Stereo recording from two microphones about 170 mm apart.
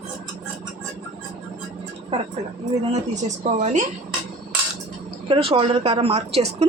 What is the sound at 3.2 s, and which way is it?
Speech, 45° right (ahead or behind).